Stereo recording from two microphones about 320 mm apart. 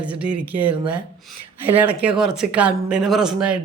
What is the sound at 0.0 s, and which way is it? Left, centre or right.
Speech, centre.